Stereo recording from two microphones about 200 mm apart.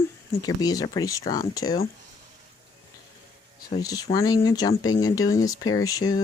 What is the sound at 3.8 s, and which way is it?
Speech, 20° left (ahead or behind).